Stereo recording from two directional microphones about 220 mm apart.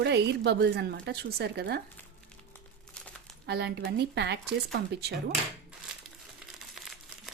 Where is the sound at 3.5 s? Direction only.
50° right (ahead or behind).